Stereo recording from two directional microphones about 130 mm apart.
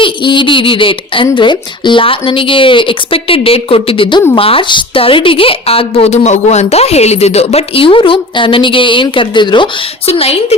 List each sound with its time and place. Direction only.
0.0 s a child's voice: 40° left (ahead or behind)
10.1 s a woman's voice: 50° left (ahead or behind)